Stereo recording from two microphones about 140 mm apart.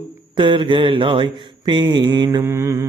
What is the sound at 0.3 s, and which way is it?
Mantra, 35° right (ahead or behind).